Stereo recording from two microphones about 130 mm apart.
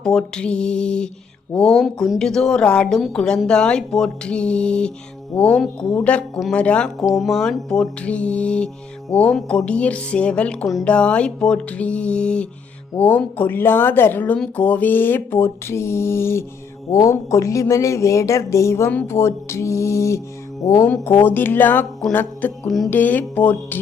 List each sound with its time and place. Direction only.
0.0 s mantra: 5° left (ahead or behind)
1.5 s a woman's voice: 5° left (ahead or behind)
5.3 s mantra: 10° left (ahead or behind)
7.0 s mantra: centre (ahead or behind); by 16.4 s 20° left (ahead or behind)
16.9 s speech: 25° left (ahead or behind)
20.9 s mantra: 15° left (ahead or behind)
22.6 s a woman's voice: centre (ahead or behind)
22.9 s mantra: 15° left (ahead or behind)